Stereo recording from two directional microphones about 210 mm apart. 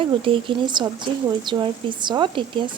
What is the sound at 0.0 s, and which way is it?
Speech, 25° right (ahead or behind).